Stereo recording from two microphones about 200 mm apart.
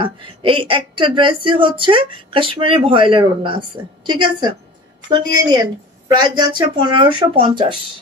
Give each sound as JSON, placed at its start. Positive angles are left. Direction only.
{"t": 0.0, "sound": "speech", "side_deg": -25}